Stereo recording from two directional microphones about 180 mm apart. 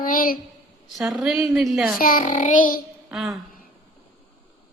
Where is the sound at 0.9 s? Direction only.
Centre (ahead or behind).